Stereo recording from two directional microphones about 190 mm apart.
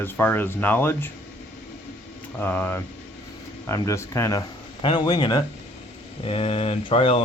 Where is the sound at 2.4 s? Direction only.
10° left (ahead or behind).